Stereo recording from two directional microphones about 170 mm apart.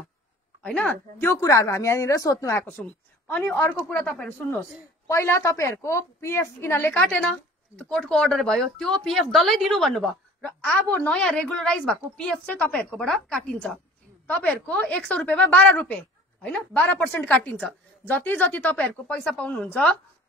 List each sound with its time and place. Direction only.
0.6 s a woman's voice: 10° left (ahead or behind)